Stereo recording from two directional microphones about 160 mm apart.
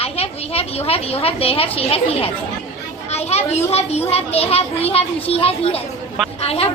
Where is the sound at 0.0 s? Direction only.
40° left (ahead or behind).